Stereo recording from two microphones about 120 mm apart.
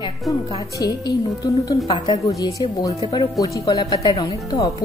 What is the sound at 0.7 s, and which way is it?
Speech, 35° left (ahead or behind).